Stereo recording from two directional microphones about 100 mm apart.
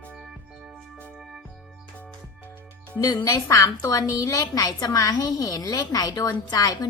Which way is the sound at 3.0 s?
40° left (ahead or behind).